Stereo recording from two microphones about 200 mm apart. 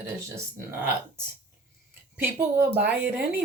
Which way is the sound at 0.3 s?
15° right (ahead or behind).